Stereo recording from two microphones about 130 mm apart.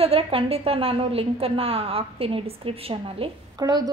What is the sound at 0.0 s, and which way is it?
A woman's voice, 45° right (ahead or behind).